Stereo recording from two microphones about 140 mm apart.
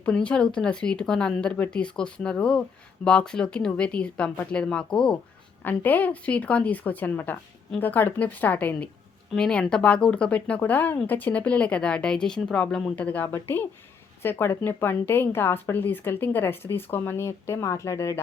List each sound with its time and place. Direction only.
0.0 s speech: 10° left (ahead or behind)